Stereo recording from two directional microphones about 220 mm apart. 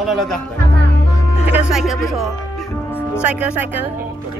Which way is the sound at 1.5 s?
Centre (ahead or behind).